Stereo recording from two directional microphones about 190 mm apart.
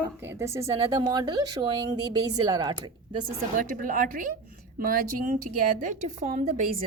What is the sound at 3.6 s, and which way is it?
A woman's voice, 45° right (ahead or behind).